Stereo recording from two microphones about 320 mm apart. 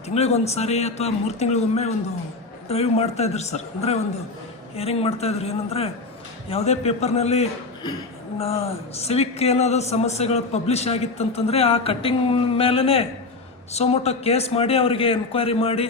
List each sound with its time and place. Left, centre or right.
0.1 s a man's voice: centre